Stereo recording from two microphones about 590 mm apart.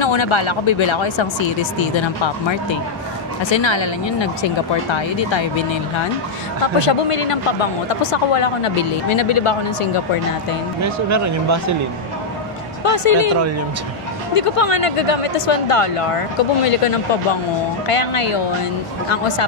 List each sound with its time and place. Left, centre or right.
0.0 s speech: left
6.6 s speech: left
10.8 s speech: right
12.8 s speech: left
14.3 s speech: left